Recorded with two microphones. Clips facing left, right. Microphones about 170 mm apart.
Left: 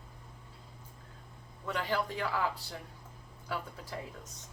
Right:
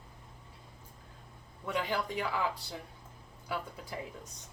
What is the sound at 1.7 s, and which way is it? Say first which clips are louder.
Speech: even; 10° right (ahead or behind).